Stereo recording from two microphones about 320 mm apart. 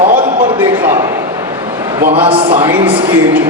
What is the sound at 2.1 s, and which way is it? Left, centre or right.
Speech, centre.